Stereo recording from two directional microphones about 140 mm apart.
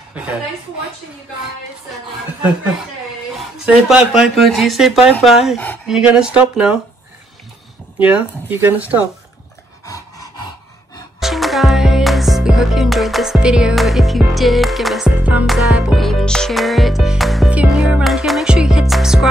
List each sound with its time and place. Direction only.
3.3 s music: 5° right (ahead or behind)
8.0 s speech: 10° right (ahead or behind)
9.8 s a sound: 25° left (ahead or behind)
11.1 s music: centre (ahead or behind)